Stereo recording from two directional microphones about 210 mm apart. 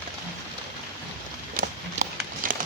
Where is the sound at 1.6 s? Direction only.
40° right (ahead or behind).